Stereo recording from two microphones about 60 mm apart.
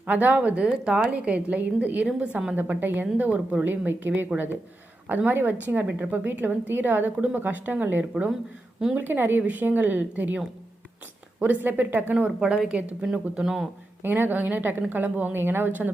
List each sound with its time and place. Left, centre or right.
0.0 s a woman's voice: right
12.4 s a woman's voice: centre
14.0 s a woman's voice: right